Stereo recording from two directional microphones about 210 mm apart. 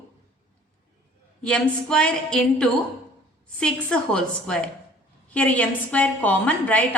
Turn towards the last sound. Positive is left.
turn(degrees=5)  # may be behind; listen again after turning